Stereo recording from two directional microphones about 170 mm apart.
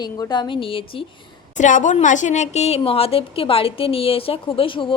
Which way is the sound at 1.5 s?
45° left (ahead or behind).